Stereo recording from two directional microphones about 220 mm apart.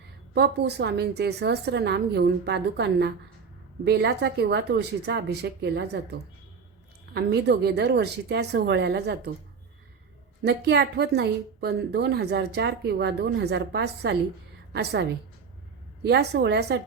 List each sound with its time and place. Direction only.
0.3 s a woman's voice: 50° right (ahead or behind)
10.4 s a woman's voice: 50° right (ahead or behind)
16.0 s a woman's voice: 50° right (ahead or behind)